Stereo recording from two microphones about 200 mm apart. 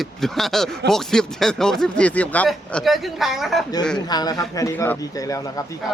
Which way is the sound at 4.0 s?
20° left (ahead or behind).